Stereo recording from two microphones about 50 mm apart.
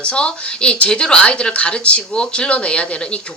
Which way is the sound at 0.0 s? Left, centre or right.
Left.